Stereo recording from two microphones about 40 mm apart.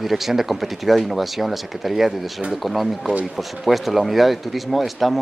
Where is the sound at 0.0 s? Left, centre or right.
Centre.